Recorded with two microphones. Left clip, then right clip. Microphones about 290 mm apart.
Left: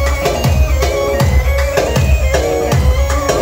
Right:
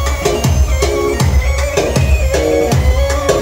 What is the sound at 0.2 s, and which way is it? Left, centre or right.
Music, right.